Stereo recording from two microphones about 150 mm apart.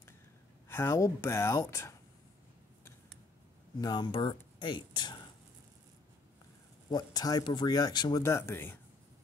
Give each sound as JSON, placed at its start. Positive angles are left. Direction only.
{"t": 0.7, "sound": "speech", "side_deg": 20}
{"t": 3.8, "sound": "speech", "side_deg": 30}
{"t": 6.9, "sound": "speech", "side_deg": 25}